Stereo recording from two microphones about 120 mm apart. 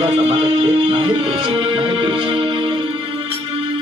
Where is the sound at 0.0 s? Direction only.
60° right (ahead or behind).